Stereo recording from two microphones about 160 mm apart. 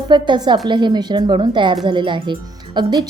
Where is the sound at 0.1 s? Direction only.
30° right (ahead or behind).